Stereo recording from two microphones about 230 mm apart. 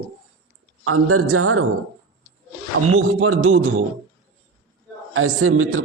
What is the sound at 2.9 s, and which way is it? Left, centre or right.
Speech, right.